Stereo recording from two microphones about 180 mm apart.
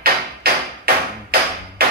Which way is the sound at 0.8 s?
55° right (ahead or behind).